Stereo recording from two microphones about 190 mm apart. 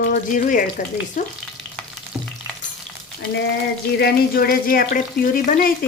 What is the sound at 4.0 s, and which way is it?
Speech, 55° left (ahead or behind).